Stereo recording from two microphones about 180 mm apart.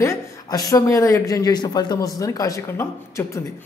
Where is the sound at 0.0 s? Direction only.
20° left (ahead or behind).